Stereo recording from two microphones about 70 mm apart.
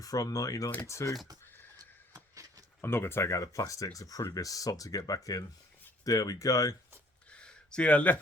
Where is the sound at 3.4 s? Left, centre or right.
Left.